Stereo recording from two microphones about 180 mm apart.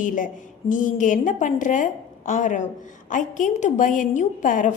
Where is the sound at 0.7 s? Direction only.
45° left (ahead or behind).